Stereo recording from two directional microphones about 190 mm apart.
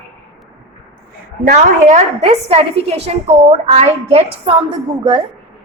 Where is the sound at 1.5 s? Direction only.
40° right (ahead or behind).